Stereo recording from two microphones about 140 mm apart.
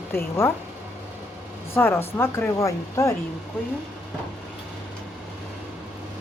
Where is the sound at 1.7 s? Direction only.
15° left (ahead or behind).